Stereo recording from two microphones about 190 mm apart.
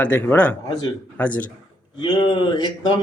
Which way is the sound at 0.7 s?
20° left (ahead or behind).